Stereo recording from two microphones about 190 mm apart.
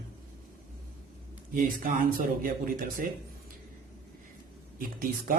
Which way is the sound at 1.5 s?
50° right (ahead or behind).